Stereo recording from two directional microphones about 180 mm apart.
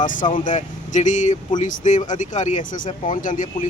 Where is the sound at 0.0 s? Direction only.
45° left (ahead or behind).